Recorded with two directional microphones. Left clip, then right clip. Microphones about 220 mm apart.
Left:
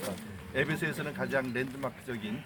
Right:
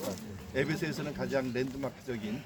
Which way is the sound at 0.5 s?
10° right (ahead or behind).